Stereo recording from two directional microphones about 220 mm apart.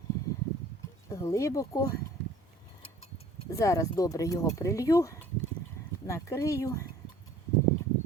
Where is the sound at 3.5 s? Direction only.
15° left (ahead or behind).